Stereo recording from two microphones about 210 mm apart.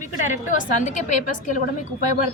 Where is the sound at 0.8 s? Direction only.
40° left (ahead or behind).